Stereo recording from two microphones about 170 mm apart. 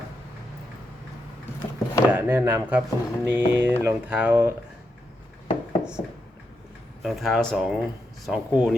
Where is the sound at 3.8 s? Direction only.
10° right (ahead or behind).